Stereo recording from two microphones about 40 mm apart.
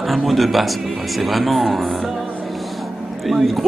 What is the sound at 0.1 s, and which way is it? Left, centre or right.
Speech, centre.